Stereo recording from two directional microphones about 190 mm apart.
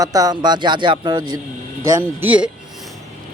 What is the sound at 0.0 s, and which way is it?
Speech, 20° right (ahead or behind).